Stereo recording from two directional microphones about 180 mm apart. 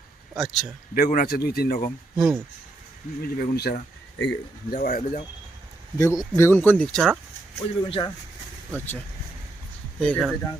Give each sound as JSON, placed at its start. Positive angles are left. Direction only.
{"t": 0.3, "sound": "speech", "side_deg": 0}
{"t": 0.9, "sound": "speech", "side_deg": 50}
{"t": 2.1, "sound": "speech", "side_deg": -5}
{"t": 3.2, "sound": "speech", "side_deg": 55}
{"t": 6.0, "sound": "speech", "side_deg": 15}
{"t": 7.9, "sound": "speech", "side_deg": 30}
{"t": 10.0, "sound": "speech", "side_deg": 5}